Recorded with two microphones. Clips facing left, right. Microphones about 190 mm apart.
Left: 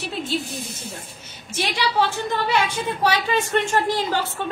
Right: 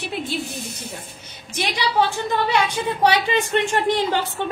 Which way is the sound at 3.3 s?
20° right (ahead or behind).